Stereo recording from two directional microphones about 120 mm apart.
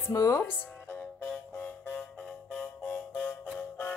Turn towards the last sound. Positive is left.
turn(degrees=10)  # may be behind; listen again after turning